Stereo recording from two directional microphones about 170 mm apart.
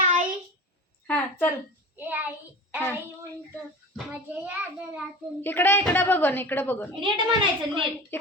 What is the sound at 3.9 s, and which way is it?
Speech, 10° right (ahead or behind).